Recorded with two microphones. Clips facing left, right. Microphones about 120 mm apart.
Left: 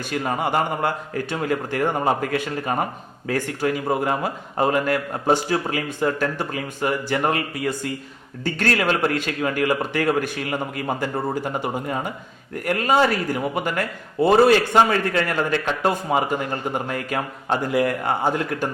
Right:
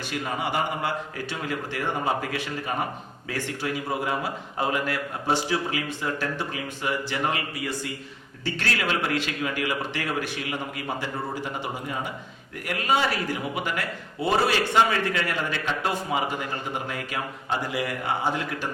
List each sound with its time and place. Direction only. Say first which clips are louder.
0.1 s a man's voice: left 6 dB; 45° left (ahead or behind)